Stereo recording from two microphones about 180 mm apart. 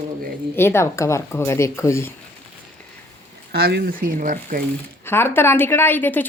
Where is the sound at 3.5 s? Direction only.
65° right (ahead or behind).